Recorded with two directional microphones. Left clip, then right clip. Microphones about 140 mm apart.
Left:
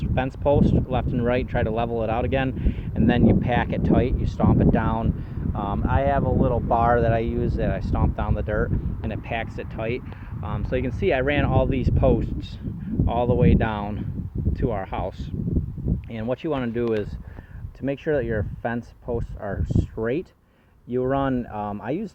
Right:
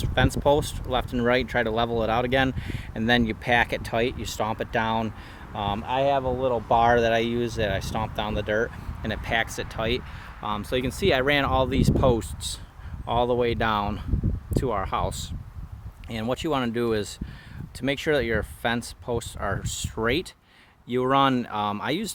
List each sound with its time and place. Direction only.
0.0 s speech: 35° right (ahead or behind)
10.4 s speech: 20° right (ahead or behind)
16.1 s speech: 25° right (ahead or behind)
17.8 s speech: 15° right (ahead or behind); by 19.6 s 30° right (ahead or behind)
20.0 s speech: 40° right (ahead or behind)
20.9 s speech: 25° right (ahead or behind)